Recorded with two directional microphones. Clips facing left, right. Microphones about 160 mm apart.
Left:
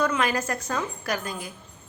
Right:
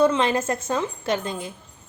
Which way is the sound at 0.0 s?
25° right (ahead or behind).